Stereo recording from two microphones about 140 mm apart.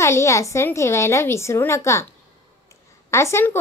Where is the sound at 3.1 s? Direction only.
20° left (ahead or behind).